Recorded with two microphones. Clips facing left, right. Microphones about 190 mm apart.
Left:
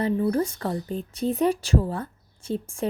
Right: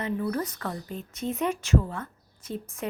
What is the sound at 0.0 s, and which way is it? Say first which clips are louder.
Speech: left 6 dB; 30° left (ahead or behind).